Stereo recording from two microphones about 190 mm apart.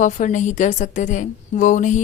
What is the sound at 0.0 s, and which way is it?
Speech, 40° left (ahead or behind).